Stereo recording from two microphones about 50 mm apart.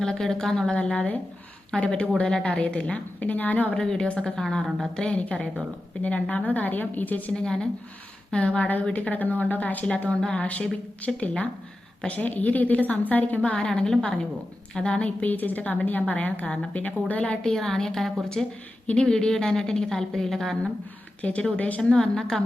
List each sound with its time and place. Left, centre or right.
0.0 s a woman's voice: centre
0.9 s a woman's voice: left
3.2 s a woman's voice: left
3.8 s a woman's voice: centre; by 7.3 s left
7.3 s a woman's voice: centre; by 13.4 s left
13.4 s a woman's voice: left
17.2 s a woman's voice: centre
21.2 s a woman's voice: left; by 22.4 s centre